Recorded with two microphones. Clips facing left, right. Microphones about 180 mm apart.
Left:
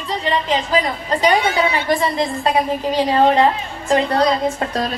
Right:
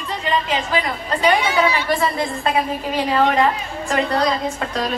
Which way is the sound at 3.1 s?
30° left (ahead or behind).